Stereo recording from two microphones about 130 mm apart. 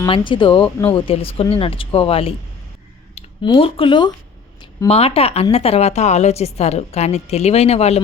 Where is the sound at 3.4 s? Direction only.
40° left (ahead or behind).